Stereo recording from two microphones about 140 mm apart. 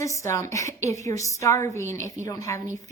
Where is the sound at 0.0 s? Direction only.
20° left (ahead or behind).